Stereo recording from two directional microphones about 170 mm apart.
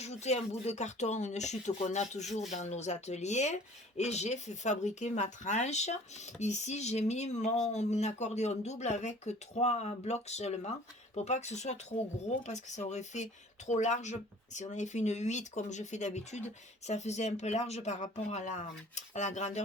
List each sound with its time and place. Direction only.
0.0 s speech: 40° left (ahead or behind)